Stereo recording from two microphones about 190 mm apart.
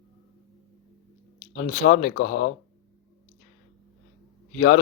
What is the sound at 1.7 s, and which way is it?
Speech, 45° left (ahead or behind).